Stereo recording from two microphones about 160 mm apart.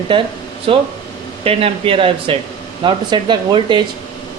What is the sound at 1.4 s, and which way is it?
Speech, 35° right (ahead or behind).